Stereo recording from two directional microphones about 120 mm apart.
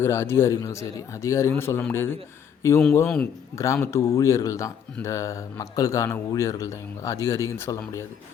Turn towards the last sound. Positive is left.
turn(degrees=25)  # may be behind; listen again after turning